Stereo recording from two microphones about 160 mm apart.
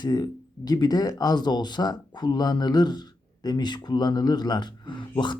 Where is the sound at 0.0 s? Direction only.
25° left (ahead or behind).